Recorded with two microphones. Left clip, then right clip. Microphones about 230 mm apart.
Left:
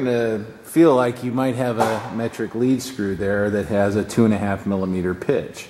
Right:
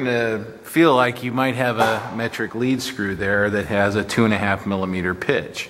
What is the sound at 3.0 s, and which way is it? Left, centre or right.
Speech, centre.